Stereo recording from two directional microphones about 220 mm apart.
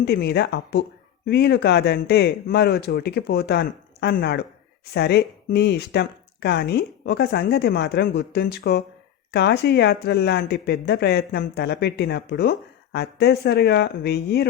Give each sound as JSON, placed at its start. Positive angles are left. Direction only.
{"t": 0.0, "sound": "speech", "side_deg": 45}